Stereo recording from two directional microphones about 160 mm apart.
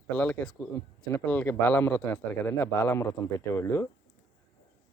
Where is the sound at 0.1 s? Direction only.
10° left (ahead or behind).